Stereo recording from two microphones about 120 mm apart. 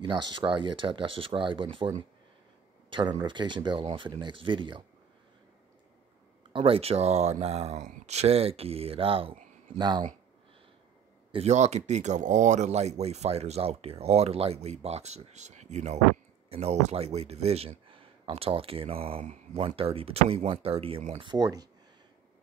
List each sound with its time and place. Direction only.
0.0 s speech: 35° right (ahead or behind)
6.5 s speech: 50° right (ahead or behind)
9.8 s speech: 35° right (ahead or behind)
11.3 s speech: 70° right (ahead or behind)
16.4 s speech: 60° right (ahead or behind)
21.2 s speech: 35° right (ahead or behind)